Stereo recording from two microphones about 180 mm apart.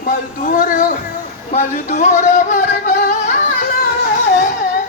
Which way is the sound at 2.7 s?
45° left (ahead or behind).